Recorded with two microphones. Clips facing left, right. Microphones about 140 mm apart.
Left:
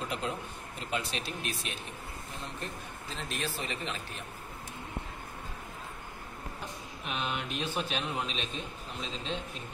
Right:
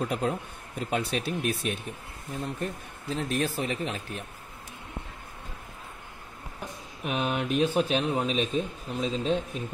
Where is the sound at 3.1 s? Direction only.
45° right (ahead or behind).